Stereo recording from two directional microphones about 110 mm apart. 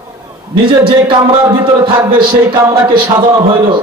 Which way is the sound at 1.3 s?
45° right (ahead or behind).